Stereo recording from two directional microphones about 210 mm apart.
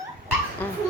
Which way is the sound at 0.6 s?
10° left (ahead or behind).